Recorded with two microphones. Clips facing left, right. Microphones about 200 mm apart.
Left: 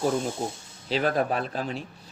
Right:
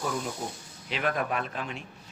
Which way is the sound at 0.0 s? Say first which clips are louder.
Left 6 dB; 25° left (ahead or behind).